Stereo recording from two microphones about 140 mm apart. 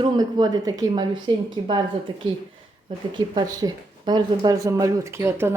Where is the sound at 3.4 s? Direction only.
30° right (ahead or behind).